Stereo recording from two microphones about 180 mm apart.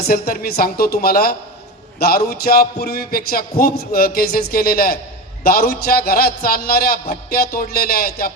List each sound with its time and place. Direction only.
0.0 s a man's voice: 60° left (ahead or behind)